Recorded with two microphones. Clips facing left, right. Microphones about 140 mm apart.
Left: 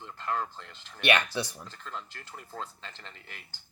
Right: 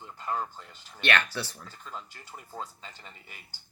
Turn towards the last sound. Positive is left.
turn(degrees=-10)  # may be behind; listen again after turning